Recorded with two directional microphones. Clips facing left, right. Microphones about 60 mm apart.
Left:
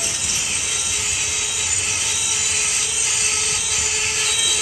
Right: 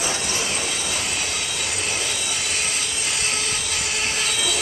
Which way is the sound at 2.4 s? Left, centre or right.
Centre.